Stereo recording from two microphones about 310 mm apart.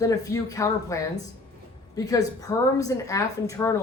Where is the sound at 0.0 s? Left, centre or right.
Centre.